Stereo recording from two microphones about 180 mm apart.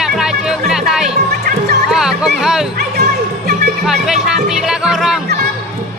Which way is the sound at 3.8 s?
Centre (ahead or behind).